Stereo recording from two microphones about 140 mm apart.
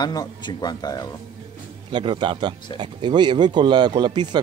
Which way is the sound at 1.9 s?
35° right (ahead or behind).